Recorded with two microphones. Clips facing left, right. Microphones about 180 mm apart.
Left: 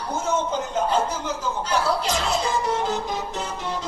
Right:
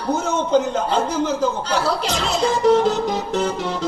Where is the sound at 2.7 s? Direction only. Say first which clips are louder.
Right 9 dB; 75° right (ahead or behind).